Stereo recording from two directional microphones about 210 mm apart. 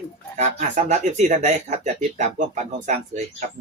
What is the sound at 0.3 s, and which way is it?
A man's voice, 35° right (ahead or behind).